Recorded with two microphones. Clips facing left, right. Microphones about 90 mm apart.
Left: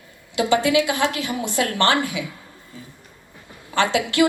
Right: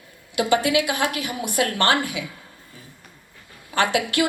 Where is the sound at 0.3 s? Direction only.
25° left (ahead or behind).